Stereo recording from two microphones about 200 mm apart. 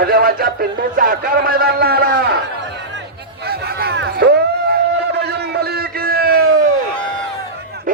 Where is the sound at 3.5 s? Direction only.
50° right (ahead or behind).